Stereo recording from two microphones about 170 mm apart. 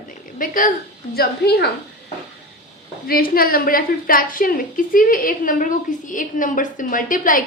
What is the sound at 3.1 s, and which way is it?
A woman's voice, 60° left (ahead or behind).